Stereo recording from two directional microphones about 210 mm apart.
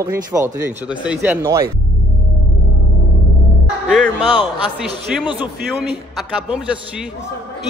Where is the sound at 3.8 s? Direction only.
Centre (ahead or behind).